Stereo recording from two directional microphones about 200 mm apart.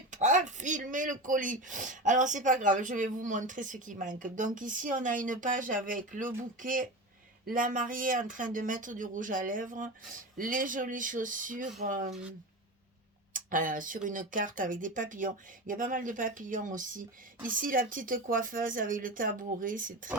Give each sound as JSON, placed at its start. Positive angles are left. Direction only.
{"t": 0.1, "sound": "speech", "side_deg": -35}
{"t": 13.3, "sound": "speech", "side_deg": -40}